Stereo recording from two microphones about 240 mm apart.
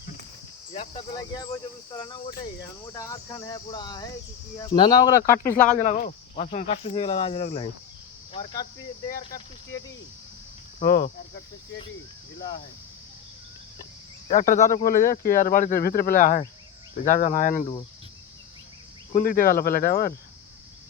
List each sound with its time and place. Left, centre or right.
0.7 s speech: left
1.1 s speech: centre
5.6 s speech: left
9.0 s speech: left
10.8 s speech: left
14.3 s speech: left
19.1 s speech: left